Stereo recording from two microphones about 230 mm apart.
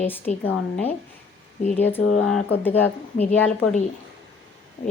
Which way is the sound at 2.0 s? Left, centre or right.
Left.